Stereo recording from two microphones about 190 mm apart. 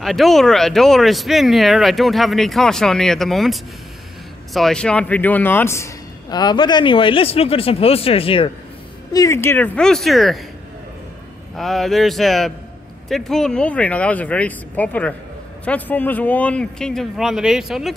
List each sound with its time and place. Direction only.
0.0 s a man's voice: centre (ahead or behind); by 8.5 s 30° left (ahead or behind)
9.1 s speech: 15° left (ahead or behind); by 10.4 s centre (ahead or behind)
11.5 s speech: centre (ahead or behind)